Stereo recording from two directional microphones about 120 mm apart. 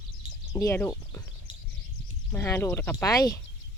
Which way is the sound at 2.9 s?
30° left (ahead or behind).